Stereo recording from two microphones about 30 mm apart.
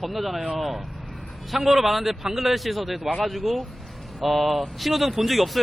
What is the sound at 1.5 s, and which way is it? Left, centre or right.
A man's voice, centre.